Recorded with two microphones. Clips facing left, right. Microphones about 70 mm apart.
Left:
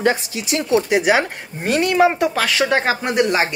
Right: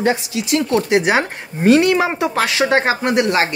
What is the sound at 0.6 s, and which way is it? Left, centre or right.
Speech, centre.